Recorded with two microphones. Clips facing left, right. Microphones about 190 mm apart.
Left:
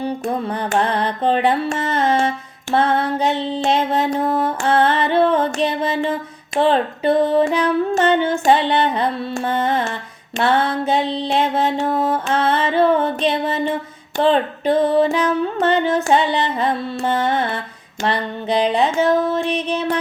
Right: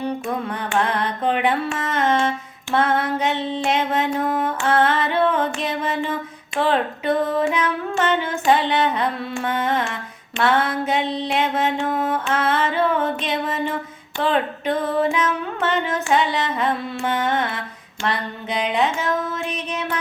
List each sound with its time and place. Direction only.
0.0 s music: 35° left (ahead or behind)